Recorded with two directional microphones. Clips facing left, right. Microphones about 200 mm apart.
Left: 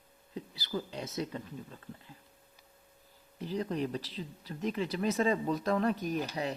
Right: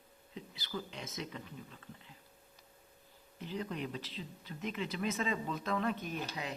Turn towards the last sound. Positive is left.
turn(degrees=35)  # may be behind; listen again after turning